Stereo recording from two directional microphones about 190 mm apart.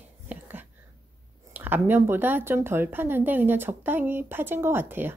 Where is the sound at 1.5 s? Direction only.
10° right (ahead or behind).